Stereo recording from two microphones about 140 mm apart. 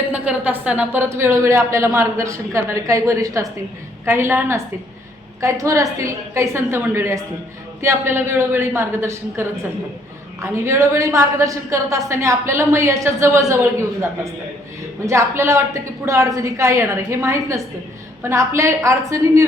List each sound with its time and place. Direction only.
0.1 s a woman's voice: 10° right (ahead or behind)